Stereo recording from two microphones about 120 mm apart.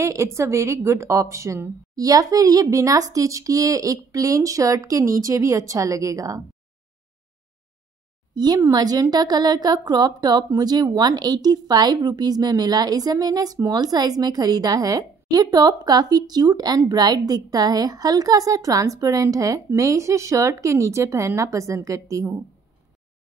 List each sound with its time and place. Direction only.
0.0 s a woman's voice: 25° right (ahead or behind)
8.4 s a woman's voice: 30° right (ahead or behind)